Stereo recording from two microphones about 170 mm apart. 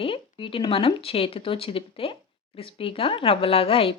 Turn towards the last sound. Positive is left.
turn(degrees=35)  # may be behind; listen again after turning